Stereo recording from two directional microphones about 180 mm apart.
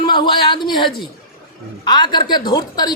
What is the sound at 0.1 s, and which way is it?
A man's voice, 25° left (ahead or behind).